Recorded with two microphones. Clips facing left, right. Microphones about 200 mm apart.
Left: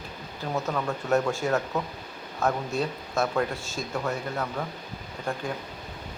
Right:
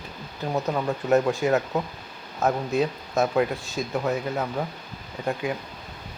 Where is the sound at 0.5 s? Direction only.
20° right (ahead or behind).